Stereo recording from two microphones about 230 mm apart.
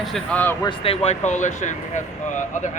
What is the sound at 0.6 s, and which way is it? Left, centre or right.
Speech, left.